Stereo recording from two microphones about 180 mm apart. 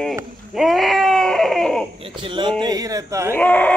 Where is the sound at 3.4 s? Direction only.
10° left (ahead or behind).